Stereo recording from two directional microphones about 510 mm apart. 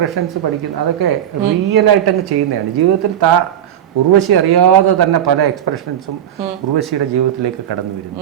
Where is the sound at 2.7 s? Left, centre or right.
Right.